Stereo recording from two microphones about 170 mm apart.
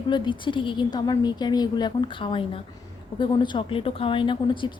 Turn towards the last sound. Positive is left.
turn(degrees=30)  # may be behind; listen again after turning